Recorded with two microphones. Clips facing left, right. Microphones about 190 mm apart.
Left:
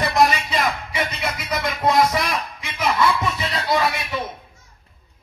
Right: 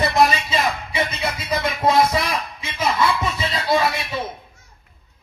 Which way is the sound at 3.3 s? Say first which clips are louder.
Right 2 dB; 20° right (ahead or behind).